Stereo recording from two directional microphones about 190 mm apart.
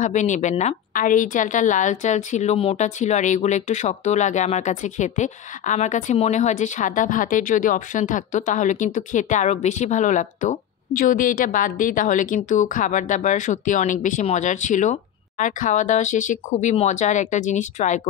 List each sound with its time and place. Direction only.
0.0 s a woman's voice: 40° left (ahead or behind)